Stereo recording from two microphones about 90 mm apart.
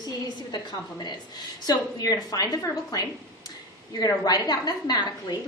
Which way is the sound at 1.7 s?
45° left (ahead or behind).